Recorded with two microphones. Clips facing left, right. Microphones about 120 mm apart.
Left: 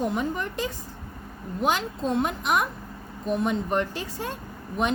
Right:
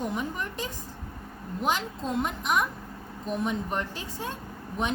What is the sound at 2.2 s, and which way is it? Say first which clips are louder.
A woman's voice: left 2 dB; 70° left (ahead or behind).